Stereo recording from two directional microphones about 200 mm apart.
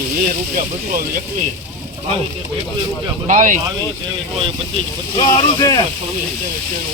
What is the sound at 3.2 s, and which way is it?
Speech, 40° right (ahead or behind).